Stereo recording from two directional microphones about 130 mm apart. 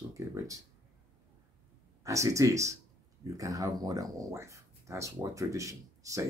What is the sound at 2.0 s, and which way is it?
Speech, 25° right (ahead or behind).